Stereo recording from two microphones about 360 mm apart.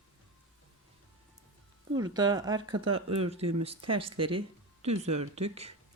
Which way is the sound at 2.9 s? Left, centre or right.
Right.